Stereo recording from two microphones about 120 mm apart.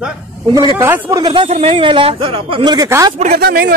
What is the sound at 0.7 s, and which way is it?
Speech, 20° right (ahead or behind).